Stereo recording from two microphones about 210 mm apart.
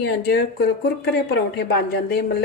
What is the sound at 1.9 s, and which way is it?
Speech, 50° left (ahead or behind).